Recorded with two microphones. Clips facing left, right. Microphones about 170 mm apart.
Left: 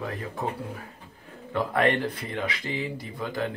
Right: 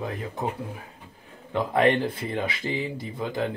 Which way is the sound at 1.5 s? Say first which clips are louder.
Right 2 dB; 20° right (ahead or behind).